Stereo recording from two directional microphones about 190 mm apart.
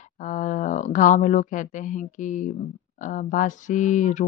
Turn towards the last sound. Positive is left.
turn(degrees=40)  # may be behind; listen again after turning